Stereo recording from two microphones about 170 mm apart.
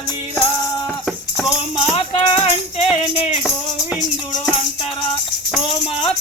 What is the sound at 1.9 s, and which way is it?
Speech, 35° left (ahead or behind).